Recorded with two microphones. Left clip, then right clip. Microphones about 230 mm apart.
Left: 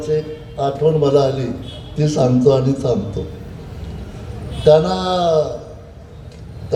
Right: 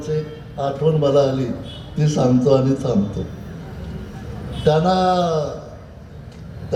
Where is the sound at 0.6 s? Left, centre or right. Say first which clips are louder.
Left 3 dB; left.